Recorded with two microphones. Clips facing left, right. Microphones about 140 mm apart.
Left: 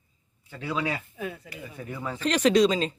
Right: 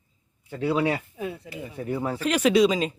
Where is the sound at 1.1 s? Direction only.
20° right (ahead or behind).